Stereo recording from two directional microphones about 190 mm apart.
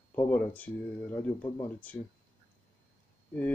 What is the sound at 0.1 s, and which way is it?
A man's voice, 10° left (ahead or behind).